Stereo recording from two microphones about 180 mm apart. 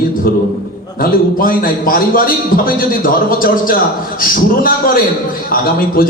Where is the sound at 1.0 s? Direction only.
55° left (ahead or behind).